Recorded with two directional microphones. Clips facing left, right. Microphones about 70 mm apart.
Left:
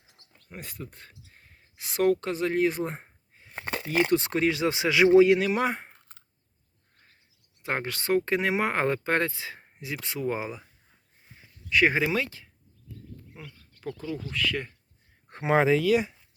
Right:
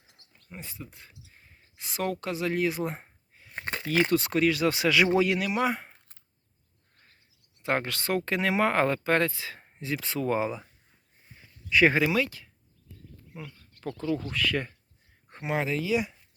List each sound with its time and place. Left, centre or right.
0.5 s speech: left
4.1 s speech: left
5.5 s speech: left
7.6 s speech: centre
9.8 s speech: centre
11.7 s speech: centre
11.9 s speech: left
14.2 s speech: centre
15.3 s speech: left